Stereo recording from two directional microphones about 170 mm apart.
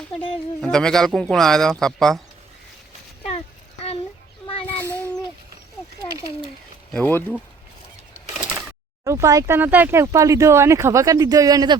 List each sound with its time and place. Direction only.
0.6 s speech: 5° left (ahead or behind)
4.8 s a sound: 15° left (ahead or behind)
6.9 s speech: 10° left (ahead or behind)
9.0 s speech: 20° right (ahead or behind)